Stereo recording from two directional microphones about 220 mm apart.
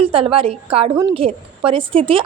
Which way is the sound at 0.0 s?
25° right (ahead or behind).